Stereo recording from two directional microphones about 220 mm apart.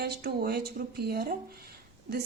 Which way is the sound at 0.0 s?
45° right (ahead or behind).